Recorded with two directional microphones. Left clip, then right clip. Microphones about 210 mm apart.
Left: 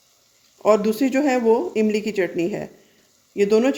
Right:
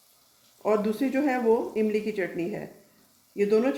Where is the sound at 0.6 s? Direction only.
50° left (ahead or behind).